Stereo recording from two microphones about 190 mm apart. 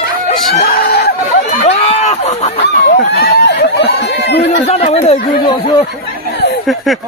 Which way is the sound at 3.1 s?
60° left (ahead or behind).